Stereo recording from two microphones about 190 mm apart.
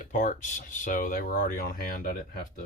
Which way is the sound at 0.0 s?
40° left (ahead or behind).